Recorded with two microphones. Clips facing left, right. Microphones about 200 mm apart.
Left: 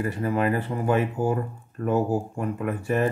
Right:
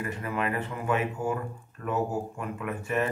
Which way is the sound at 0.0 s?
35° left (ahead or behind).